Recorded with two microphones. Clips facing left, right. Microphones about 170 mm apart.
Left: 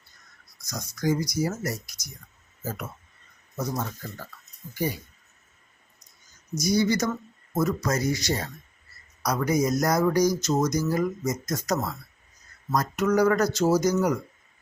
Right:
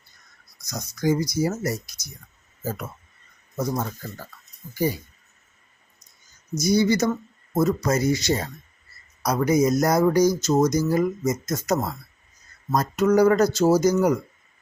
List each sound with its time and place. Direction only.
0.7 s speech: 25° right (ahead or behind)
4.7 s speech: 30° right (ahead or behind)
6.6 s speech: 25° right (ahead or behind)